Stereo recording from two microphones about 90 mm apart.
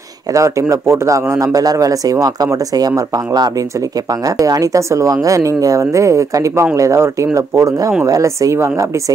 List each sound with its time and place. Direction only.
0.3 s speech: 35° right (ahead or behind)